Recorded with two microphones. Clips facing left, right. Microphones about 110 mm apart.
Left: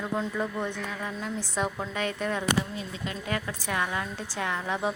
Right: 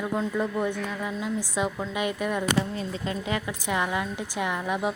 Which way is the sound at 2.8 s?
35° right (ahead or behind).